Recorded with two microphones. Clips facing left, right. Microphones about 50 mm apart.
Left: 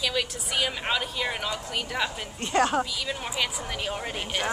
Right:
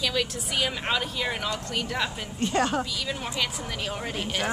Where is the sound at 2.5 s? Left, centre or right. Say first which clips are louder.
Left 3 dB; left.